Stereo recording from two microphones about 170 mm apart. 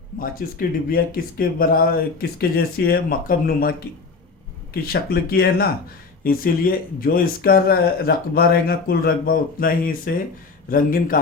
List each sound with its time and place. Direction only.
0.4 s speech: 60° left (ahead or behind)